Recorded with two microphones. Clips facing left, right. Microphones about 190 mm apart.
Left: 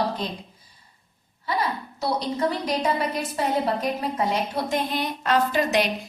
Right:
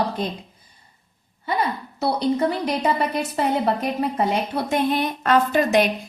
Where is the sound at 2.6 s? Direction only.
60° right (ahead or behind).